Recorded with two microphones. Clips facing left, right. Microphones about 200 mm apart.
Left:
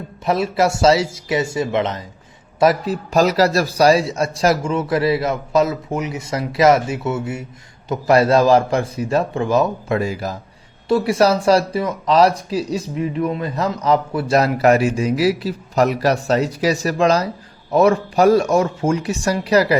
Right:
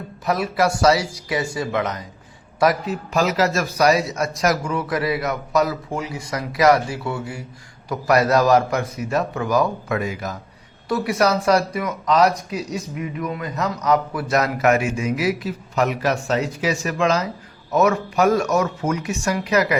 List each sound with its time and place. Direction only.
0.3 s a man's voice: 25° left (ahead or behind)